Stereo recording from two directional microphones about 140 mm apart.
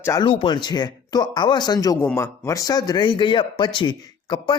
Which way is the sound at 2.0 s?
20° left (ahead or behind).